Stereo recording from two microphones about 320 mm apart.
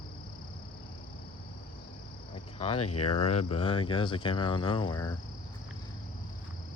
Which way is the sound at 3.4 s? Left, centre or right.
Centre.